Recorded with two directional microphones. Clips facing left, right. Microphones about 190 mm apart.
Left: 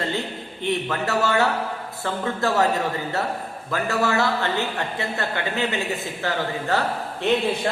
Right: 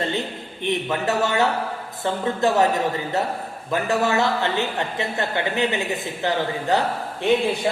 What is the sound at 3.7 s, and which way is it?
A man's voice, 20° right (ahead or behind).